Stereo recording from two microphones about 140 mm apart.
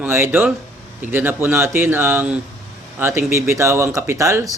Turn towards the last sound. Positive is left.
turn(degrees=-20)  # may be behind; listen again after turning